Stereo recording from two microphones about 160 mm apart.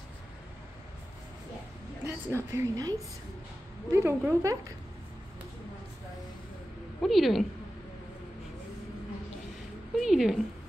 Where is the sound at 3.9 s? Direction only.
15° right (ahead or behind).